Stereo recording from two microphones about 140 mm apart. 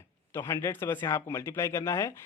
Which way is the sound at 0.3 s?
20° left (ahead or behind).